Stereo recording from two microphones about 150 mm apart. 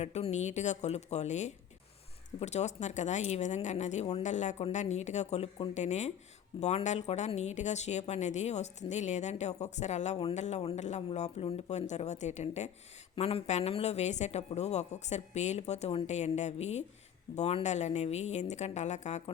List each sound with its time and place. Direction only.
0.0 s speech: 45° left (ahead or behind)